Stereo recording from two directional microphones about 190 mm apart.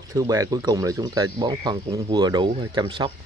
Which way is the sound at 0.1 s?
15° right (ahead or behind).